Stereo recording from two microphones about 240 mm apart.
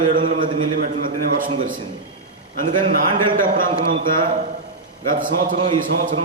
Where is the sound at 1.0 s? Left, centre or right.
Right.